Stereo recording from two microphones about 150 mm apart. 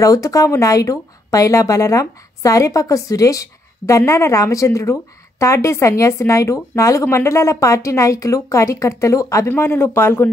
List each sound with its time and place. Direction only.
0.0 s a woman's voice: 20° left (ahead or behind)